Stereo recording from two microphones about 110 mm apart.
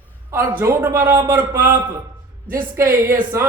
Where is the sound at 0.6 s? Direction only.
20° right (ahead or behind).